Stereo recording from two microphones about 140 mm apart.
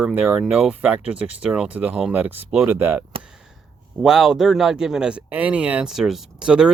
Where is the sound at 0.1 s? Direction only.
10° right (ahead or behind).